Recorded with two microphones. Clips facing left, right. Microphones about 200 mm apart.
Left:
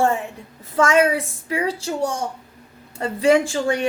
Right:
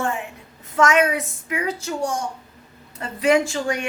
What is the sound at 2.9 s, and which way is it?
Speech, 30° left (ahead or behind).